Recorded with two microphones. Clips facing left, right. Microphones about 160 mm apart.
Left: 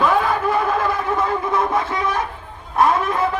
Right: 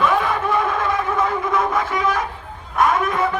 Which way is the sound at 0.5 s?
35° left (ahead or behind).